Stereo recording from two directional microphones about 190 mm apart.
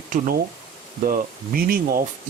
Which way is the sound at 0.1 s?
45° right (ahead or behind).